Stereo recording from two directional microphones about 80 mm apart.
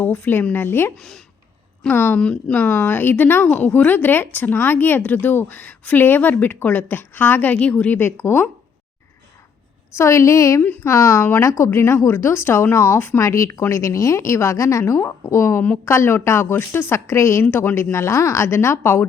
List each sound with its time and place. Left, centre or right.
0.0 s speech: left
0.9 s a woman's voice: centre
1.9 s speech: left
2.1 s a woman's voice: centre
2.6 s speech: left
7.9 s speech: left
9.9 s a woman's voice: left
13.2 s a woman's voice: left